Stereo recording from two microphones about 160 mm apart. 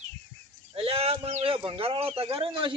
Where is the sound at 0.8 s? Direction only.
35° right (ahead or behind).